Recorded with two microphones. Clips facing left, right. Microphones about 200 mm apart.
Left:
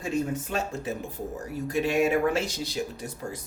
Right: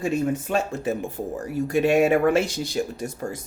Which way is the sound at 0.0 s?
60° right (ahead or behind).